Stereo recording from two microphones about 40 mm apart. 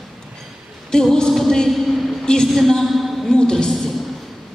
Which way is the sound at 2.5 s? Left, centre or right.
Centre.